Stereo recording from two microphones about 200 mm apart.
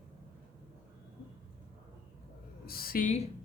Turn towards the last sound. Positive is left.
turn(degrees=35)  # may be behind; listen again after turning